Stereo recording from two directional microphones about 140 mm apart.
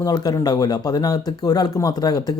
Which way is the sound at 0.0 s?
25° left (ahead or behind).